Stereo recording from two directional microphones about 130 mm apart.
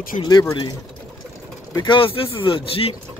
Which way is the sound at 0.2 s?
30° left (ahead or behind).